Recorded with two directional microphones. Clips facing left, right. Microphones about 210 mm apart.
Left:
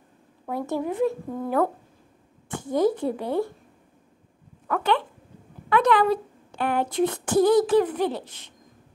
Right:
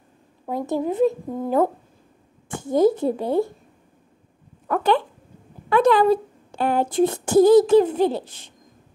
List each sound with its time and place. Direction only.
0.5 s speech: 20° right (ahead or behind)
2.6 s speech: 45° right (ahead or behind)
3.1 s speech: 35° right (ahead or behind)
4.6 s speech: 35° right (ahead or behind)